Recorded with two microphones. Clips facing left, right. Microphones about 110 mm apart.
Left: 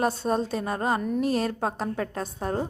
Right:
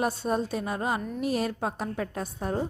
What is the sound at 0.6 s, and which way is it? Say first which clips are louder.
Speech: left 3 dB; 45° left (ahead or behind).